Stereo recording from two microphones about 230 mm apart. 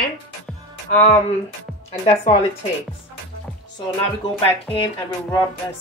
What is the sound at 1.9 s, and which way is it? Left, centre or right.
Speech, left.